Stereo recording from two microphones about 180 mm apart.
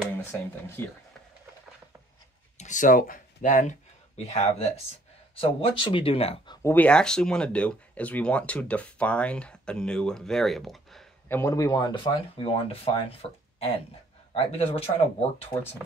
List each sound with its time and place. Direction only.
0.8 s speech: 15° left (ahead or behind)
2.5 s speech: 40° left (ahead or behind); by 6.7 s 25° left (ahead or behind)
6.7 s speech: 5° left (ahead or behind)
11.2 s speech: 15° left (ahead or behind); by 15.2 s 35° left (ahead or behind)